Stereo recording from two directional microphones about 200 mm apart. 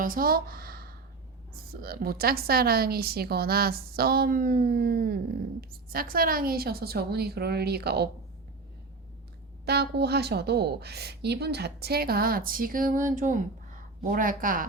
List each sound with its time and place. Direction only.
0.0 s a woman's voice: 45° right (ahead or behind)
9.6 s a woman's voice: 55° right (ahead or behind)